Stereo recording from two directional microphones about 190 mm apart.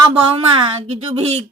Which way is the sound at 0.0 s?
30° right (ahead or behind).